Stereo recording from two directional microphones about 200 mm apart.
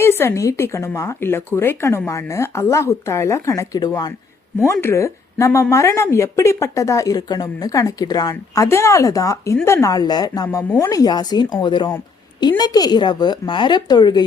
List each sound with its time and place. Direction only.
0.0 s a woman's voice: 10° left (ahead or behind)